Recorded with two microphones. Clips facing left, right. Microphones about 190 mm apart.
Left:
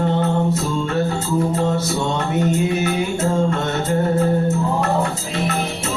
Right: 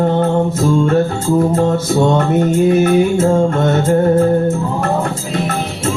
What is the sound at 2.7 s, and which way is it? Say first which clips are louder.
Music: right 9 dB; 50° right (ahead or behind).